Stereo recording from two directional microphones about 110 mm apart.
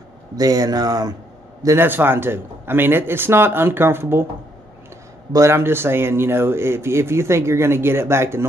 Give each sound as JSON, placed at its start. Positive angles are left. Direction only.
{"t": 0.4, "sound": "a man's voice", "side_deg": -35}
{"t": 1.9, "sound": "speech", "side_deg": -20}
{"t": 5.3, "sound": "speech", "side_deg": -25}